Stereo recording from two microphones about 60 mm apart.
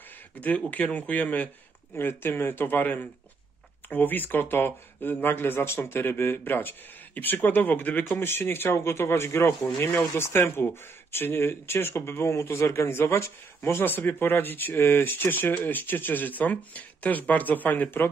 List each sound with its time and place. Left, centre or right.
0.6 s speech: left
2.0 s speech: left
8.7 s speech: left
12.6 s speech: left